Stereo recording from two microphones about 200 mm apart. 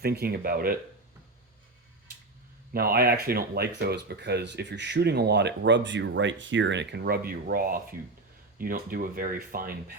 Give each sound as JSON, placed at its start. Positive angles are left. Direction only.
{"t": 0.0, "sound": "speech", "side_deg": -50}
{"t": 2.7, "sound": "speech", "side_deg": -50}